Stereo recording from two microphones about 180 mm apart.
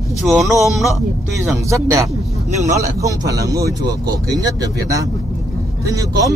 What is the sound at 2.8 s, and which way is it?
Speech, 20° right (ahead or behind).